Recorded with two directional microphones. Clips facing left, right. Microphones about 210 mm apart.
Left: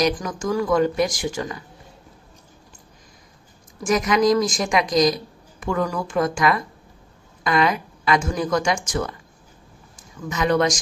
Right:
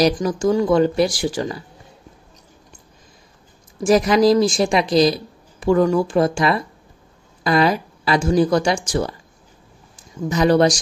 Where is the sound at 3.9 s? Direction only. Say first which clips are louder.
Right 4 dB; 30° right (ahead or behind).